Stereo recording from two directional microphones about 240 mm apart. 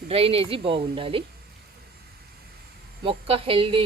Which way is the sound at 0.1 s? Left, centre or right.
Right.